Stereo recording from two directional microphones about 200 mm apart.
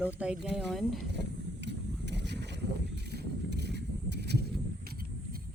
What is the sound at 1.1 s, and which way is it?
Vehicle, 60° right (ahead or behind).